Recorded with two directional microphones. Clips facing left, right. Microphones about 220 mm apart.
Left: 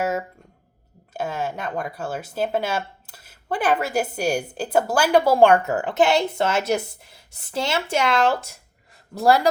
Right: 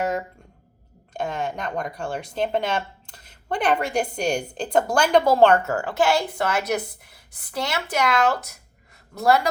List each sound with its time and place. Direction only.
0.0 s a man's voice: 5° left (ahead or behind); by 9.5 s 30° left (ahead or behind)